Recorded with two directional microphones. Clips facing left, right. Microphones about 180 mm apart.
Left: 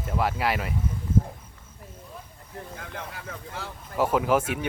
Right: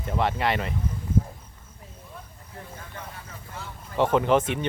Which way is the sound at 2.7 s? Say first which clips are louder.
Left 3 dB; 70° left (ahead or behind).